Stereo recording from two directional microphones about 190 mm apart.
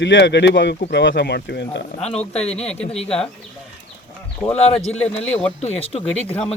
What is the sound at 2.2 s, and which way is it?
Speech, 35° left (ahead or behind).